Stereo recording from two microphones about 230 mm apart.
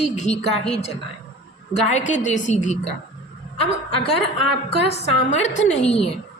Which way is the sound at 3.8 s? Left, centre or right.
Left.